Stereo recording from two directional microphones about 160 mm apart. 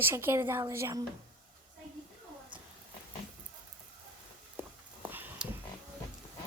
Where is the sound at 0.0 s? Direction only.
15° right (ahead or behind).